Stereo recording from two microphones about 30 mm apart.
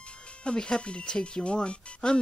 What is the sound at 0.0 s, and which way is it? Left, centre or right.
Music, left.